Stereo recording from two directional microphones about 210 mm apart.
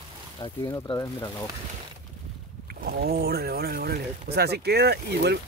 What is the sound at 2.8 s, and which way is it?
Speech, 50° right (ahead or behind).